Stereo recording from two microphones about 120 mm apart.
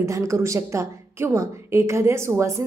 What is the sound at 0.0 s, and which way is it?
A woman's voice, 25° right (ahead or behind).